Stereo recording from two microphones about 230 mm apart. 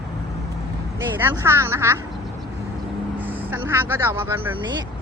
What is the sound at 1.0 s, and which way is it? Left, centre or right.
Speech, centre.